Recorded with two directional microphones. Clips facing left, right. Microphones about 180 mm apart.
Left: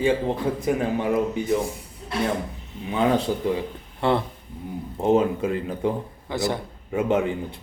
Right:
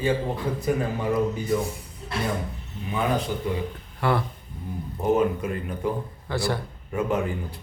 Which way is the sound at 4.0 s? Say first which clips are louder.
Left 2 dB; 25° left (ahead or behind).